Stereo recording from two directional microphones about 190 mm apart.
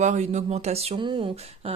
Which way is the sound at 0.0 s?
40° right (ahead or behind).